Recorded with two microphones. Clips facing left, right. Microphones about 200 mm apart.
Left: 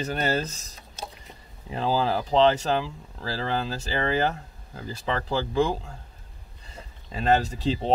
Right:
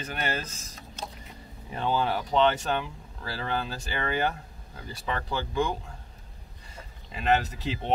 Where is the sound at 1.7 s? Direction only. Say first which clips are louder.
Left 3 dB; 30° left (ahead or behind).